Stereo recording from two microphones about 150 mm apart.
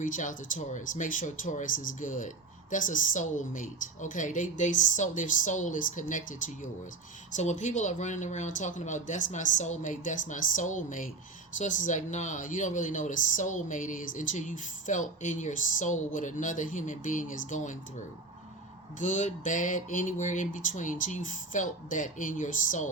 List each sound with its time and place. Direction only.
0.0 s speech: 60° left (ahead or behind)
18.9 s speech: 55° left (ahead or behind)